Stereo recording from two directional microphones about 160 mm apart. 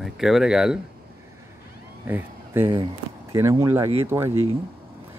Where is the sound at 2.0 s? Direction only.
15° right (ahead or behind).